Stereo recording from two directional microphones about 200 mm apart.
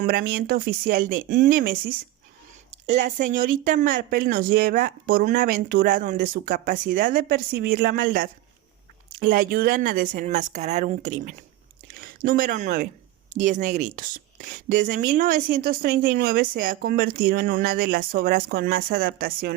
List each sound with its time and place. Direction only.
0.0 s speech: 50° right (ahead or behind)